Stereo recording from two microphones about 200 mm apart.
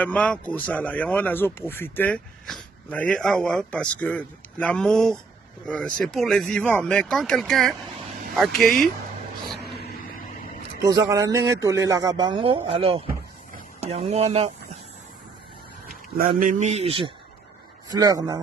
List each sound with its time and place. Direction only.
0.0 s speech: 5° left (ahead or behind)
10.8 s a man's voice: 15° right (ahead or behind)
16.1 s a man's voice: 45° right (ahead or behind); by 17.1 s 30° right (ahead or behind)
17.8 s speech: 20° right (ahead or behind)